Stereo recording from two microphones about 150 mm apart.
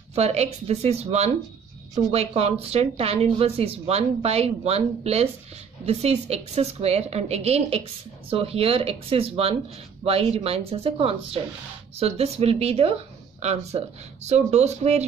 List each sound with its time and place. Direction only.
0.1 s a woman's voice: 45° right (ahead or behind)